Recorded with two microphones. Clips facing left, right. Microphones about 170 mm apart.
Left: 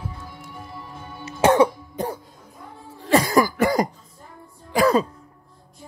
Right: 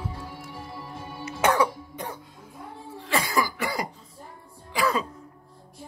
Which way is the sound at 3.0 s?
40° left (ahead or behind).